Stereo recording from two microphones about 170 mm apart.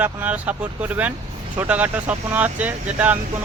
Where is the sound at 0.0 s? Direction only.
10° right (ahead or behind).